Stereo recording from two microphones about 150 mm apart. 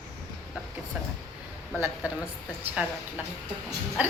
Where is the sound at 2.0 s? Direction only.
10° right (ahead or behind).